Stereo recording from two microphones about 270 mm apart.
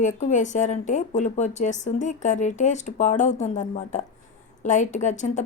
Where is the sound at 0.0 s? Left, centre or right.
Left.